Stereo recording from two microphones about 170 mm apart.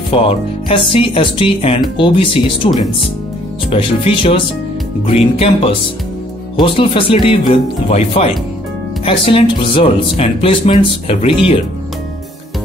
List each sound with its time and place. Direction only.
0.1 s speech: 30° left (ahead or behind)
3.7 s speech: 35° left (ahead or behind)